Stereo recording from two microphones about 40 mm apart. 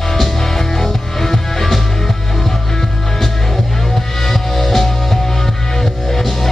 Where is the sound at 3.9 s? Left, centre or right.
Centre.